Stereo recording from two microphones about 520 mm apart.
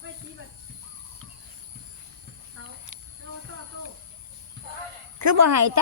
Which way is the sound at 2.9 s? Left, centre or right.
Right.